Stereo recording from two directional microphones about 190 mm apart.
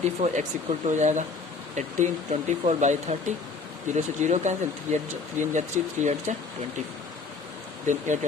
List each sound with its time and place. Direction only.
0.2 s speech: 40° right (ahead or behind)
7.9 s speech: 40° right (ahead or behind)